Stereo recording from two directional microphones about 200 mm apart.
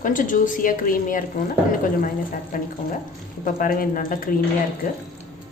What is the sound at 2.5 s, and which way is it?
Speech, 45° left (ahead or behind).